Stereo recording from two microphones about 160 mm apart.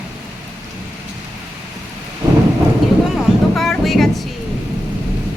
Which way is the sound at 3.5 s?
Centre (ahead or behind).